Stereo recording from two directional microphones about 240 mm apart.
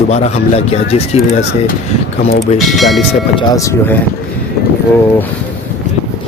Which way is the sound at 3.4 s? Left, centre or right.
Centre.